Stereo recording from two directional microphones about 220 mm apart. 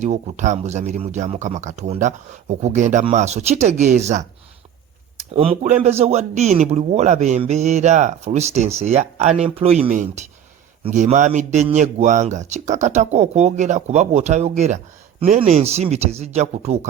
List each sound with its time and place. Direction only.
0.0 s speech: 35° right (ahead or behind)
5.3 s a man's voice: 25° right (ahead or behind)